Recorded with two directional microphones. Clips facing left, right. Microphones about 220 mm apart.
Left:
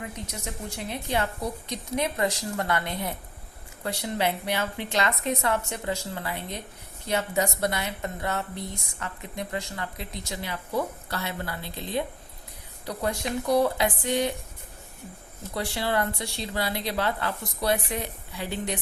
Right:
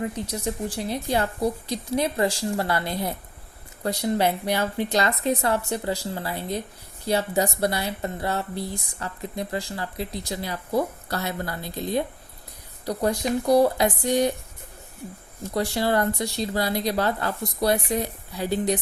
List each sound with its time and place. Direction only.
0.0 s a woman's voice: 30° right (ahead or behind)
15.5 s a woman's voice: 40° right (ahead or behind)